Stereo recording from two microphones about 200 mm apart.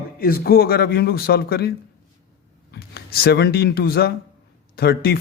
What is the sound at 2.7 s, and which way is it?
Speech, 50° left (ahead or behind).